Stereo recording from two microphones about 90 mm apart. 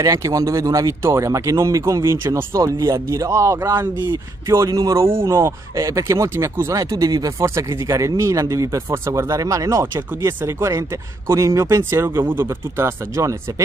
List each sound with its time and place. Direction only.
0.0 s speech: 35° right (ahead or behind)
4.6 s speech: 40° right (ahead or behind)